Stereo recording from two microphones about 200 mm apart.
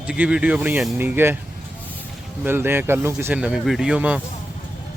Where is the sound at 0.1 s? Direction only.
5° right (ahead or behind).